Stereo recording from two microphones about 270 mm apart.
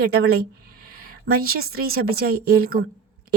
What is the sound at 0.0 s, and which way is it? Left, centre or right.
A woman's voice, right.